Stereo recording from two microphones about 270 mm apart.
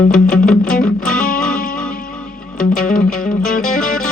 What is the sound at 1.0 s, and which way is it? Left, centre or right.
Music, left.